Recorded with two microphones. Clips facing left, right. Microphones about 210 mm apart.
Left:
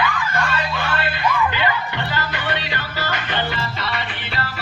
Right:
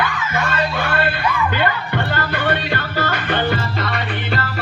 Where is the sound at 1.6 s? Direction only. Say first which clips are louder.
Right 3 dB; 50° right (ahead or behind).